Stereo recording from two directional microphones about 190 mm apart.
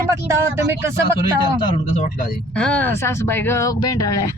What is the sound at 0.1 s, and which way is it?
Speech, 15° right (ahead or behind).